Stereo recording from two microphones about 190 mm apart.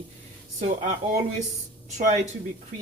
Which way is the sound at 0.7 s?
40° right (ahead or behind).